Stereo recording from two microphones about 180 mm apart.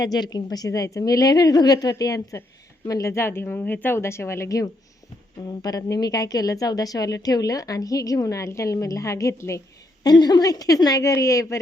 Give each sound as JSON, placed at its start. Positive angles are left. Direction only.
{"t": 0.0, "sound": "a woman's voice", "side_deg": 20}